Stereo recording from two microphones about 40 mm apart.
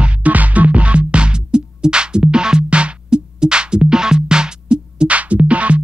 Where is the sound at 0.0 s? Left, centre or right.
Right.